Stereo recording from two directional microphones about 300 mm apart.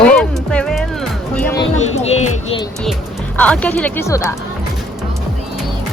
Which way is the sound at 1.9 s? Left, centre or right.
Left.